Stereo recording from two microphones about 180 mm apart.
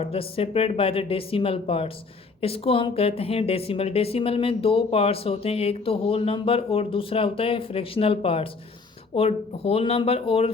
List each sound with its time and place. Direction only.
0.0 s a woman's voice: 30° left (ahead or behind)